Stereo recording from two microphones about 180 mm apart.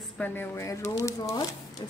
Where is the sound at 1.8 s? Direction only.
25° left (ahead or behind).